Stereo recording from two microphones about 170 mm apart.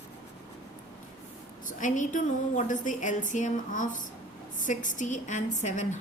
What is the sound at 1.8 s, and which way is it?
A woman's voice, 50° left (ahead or behind).